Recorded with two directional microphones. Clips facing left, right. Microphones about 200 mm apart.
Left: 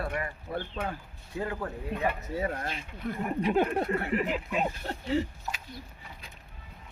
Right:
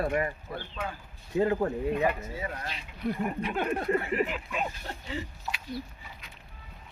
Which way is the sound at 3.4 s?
35° left (ahead or behind).